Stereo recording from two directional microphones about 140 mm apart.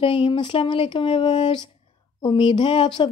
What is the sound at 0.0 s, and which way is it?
A woman's voice, 40° left (ahead or behind).